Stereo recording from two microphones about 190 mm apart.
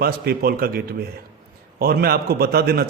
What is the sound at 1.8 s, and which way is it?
A man's voice, 55° right (ahead or behind).